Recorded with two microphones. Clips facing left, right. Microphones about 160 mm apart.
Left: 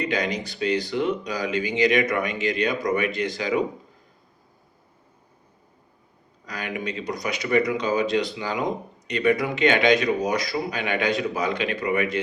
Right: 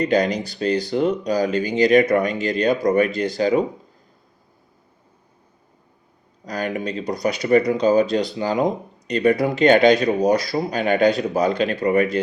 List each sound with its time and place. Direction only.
0.0 s speech: 35° right (ahead or behind)
6.4 s speech: 40° right (ahead or behind)